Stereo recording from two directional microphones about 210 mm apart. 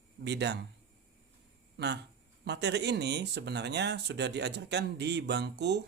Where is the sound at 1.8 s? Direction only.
50° right (ahead or behind).